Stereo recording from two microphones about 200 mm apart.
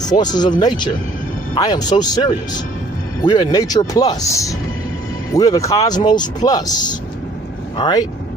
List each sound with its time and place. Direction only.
0.0 s speech: 20° left (ahead or behind)